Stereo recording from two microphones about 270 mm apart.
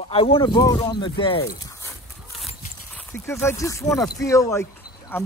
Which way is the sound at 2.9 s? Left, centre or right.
Centre.